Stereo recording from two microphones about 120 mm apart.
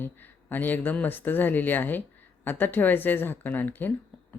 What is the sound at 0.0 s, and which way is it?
Speech, 15° left (ahead or behind).